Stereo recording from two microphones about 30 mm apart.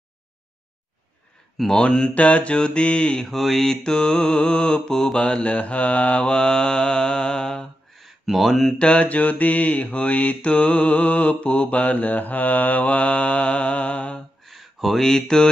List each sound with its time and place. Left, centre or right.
1.8 s mantra: left
2.1 s mantra: left
3.3 s mantra: centre
3.8 s mantra: left
5.2 s mantra: left
6.2 s mantra: left
8.0 s a sound: centre
8.5 s mantra: centre
8.7 s mantra: left
9.0 s mantra: left
10.5 s mantra: left
13.1 s mantra: left
14.5 s a sound: centre
15.0 s mantra: centre